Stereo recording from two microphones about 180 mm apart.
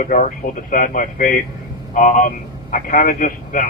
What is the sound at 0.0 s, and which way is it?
A man's voice, 45° left (ahead or behind).